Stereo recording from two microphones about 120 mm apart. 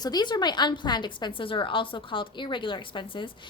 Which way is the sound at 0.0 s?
35° left (ahead or behind).